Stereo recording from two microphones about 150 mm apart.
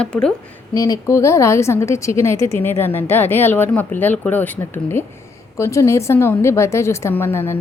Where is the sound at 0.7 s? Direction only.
20° left (ahead or behind).